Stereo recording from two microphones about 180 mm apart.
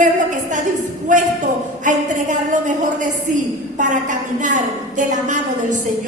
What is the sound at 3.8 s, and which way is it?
A man's voice, 45° right (ahead or behind).